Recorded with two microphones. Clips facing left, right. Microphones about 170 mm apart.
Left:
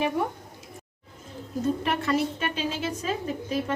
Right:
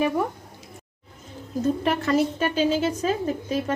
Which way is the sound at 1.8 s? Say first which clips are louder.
Right 4 dB; 40° right (ahead or behind).